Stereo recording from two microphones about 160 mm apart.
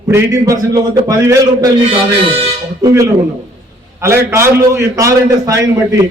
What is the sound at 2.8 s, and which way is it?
A man's voice, 20° right (ahead or behind).